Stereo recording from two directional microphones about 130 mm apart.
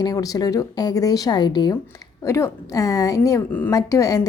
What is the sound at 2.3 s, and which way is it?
A woman's voice, 20° left (ahead or behind).